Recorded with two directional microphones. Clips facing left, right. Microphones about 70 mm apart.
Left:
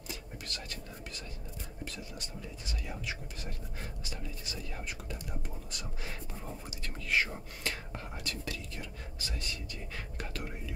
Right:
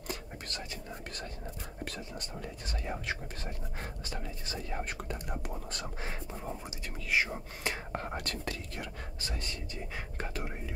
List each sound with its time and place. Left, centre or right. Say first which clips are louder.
0.5 s whispering: right 3 dB; right
2.6 s speech: right 4 dB; right
7.1 s speech: right 1 dB; centre
7.9 s speech: right 5 dB; right